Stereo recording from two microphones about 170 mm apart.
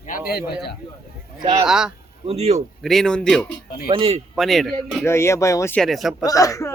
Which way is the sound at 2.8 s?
5° left (ahead or behind).